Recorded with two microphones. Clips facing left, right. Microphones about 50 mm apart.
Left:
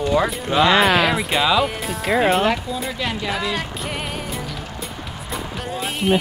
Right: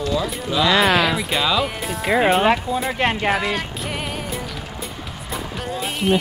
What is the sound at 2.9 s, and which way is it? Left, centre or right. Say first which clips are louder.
Speech: right 5 dB; right.